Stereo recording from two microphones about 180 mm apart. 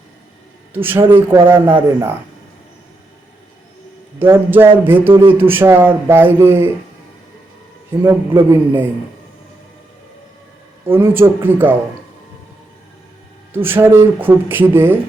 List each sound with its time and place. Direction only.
0.7 s speech: 10° right (ahead or behind)
1.5 s speech: 25° right (ahead or behind)
4.2 s speech: 10° right (ahead or behind)
8.3 s speech: 25° right (ahead or behind)
10.8 s speech: 10° right (ahead or behind)
13.5 s speech: 10° right (ahead or behind)